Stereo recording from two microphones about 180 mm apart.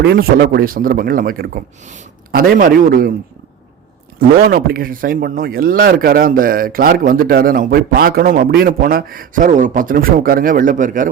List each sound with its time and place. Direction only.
0.0 s speech: 60° right (ahead or behind)
4.4 s speech: 55° right (ahead or behind)